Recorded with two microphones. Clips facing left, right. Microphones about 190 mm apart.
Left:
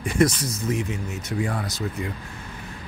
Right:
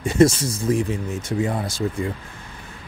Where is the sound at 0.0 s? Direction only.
25° right (ahead or behind).